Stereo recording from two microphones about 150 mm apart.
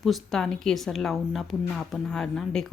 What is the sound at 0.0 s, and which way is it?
Speech, centre (ahead or behind).